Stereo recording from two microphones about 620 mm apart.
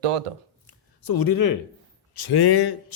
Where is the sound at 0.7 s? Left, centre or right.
Left.